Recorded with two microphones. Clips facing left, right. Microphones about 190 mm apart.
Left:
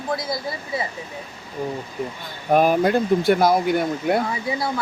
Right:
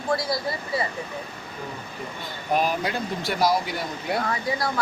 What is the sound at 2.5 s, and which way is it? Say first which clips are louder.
Speech: left 8 dB; 50° left (ahead or behind).